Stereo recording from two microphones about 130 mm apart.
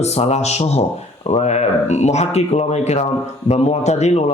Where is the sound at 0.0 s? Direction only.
55° left (ahead or behind).